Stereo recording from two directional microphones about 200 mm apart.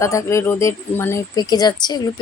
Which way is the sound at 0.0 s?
15° left (ahead or behind).